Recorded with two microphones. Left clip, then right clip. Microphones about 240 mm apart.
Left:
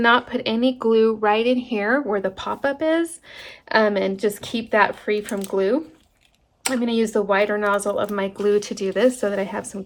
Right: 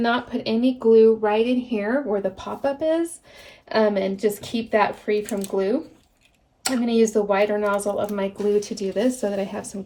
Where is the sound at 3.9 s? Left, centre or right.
Centre.